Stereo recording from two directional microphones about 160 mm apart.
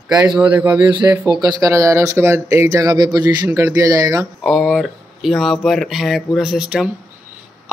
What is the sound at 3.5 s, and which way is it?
Speech, 15° right (ahead or behind).